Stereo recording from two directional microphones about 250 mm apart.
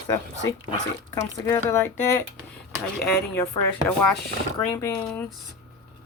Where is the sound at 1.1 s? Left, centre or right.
Centre.